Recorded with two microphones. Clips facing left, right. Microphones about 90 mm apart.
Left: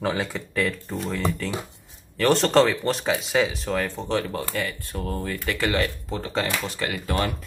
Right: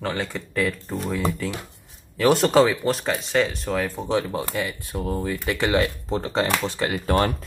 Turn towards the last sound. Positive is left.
turn(degrees=-35)  # may be behind; listen again after turning